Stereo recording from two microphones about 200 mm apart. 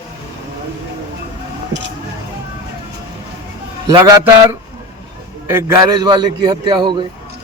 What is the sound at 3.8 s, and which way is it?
Speech, 20° right (ahead or behind).